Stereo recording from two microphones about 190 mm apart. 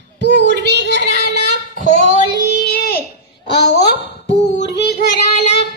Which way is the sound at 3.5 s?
60° left (ahead or behind).